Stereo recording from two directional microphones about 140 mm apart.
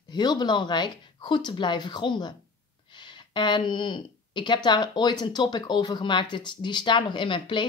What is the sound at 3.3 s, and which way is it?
Speech, 35° left (ahead or behind).